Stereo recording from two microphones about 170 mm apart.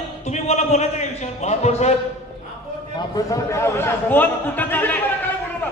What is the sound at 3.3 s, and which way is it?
A man's voice, 15° left (ahead or behind).